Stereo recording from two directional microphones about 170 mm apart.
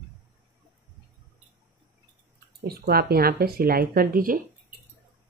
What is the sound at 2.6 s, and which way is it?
Speech, 65° right (ahead or behind).